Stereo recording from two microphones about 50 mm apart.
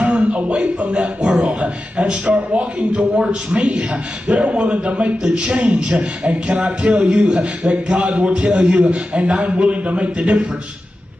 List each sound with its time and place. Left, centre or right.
0.0 s a man's voice: right